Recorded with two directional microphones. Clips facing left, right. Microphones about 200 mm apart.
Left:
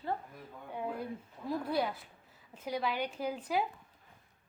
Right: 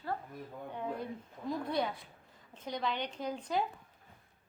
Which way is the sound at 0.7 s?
5° left (ahead or behind).